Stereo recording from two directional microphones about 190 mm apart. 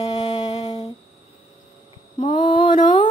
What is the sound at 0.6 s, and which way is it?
Humming, 35° left (ahead or behind).